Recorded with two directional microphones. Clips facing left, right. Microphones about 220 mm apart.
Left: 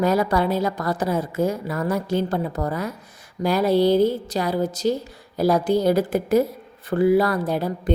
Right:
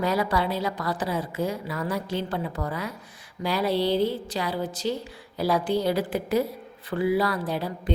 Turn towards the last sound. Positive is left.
turn(degrees=45)  # may be behind; listen again after turning